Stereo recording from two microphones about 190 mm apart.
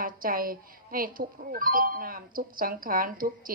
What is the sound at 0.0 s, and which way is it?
Speech, 50° right (ahead or behind).